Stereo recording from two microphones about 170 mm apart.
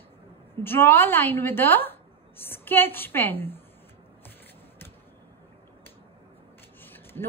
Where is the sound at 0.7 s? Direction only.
15° left (ahead or behind).